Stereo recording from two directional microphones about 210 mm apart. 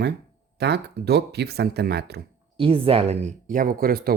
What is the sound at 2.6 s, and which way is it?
Speech, 25° right (ahead or behind).